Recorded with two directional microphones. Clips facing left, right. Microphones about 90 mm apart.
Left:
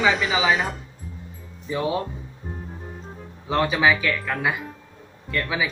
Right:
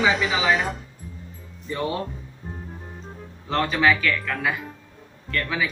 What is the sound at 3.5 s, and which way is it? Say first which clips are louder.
Speech: left 1 dB; 10° left (ahead or behind).